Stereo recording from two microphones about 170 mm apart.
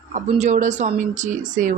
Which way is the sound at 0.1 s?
45° right (ahead or behind).